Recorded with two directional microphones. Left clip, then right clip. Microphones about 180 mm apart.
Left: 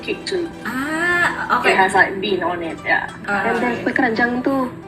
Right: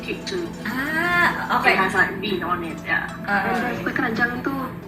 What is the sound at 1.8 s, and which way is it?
A woman's voice, 15° left (ahead or behind).